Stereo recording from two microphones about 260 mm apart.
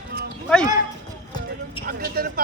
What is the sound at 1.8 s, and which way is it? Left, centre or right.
Speech, right.